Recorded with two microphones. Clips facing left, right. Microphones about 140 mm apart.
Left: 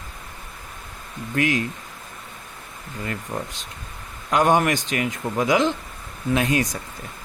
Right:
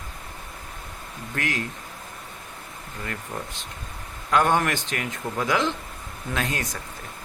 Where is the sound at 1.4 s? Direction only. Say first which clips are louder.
Left 7 dB; 15° left (ahead or behind).